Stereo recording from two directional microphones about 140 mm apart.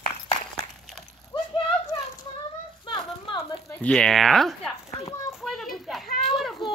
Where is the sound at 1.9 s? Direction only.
40° left (ahead or behind).